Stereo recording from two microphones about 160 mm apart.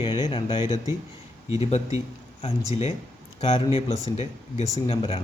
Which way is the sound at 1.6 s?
40° left (ahead or behind).